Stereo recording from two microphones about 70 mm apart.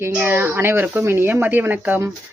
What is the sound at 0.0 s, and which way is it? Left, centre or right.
Speech, right.